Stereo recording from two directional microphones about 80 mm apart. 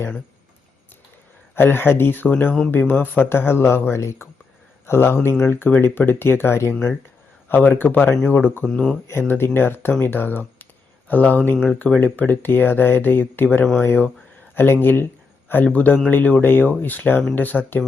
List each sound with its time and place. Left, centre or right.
1.5 s a man's voice: left